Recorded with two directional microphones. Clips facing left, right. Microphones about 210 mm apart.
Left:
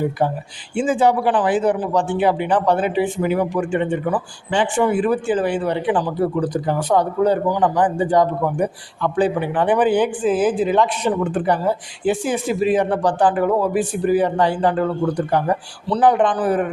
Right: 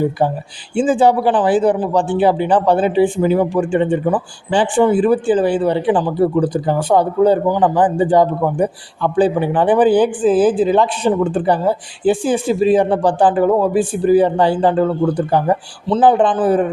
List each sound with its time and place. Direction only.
0.2 s a man's voice: 30° right (ahead or behind)